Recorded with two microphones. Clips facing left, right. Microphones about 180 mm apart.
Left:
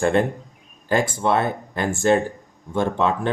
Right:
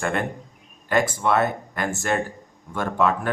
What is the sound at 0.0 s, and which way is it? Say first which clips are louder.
Speech: left 6 dB; 30° left (ahead or behind).